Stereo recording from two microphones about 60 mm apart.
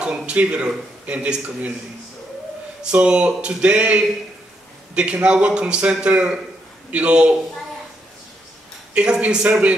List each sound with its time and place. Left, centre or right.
0.0 s a man's voice: centre
2.8 s a man's voice: centre
8.9 s a man's voice: centre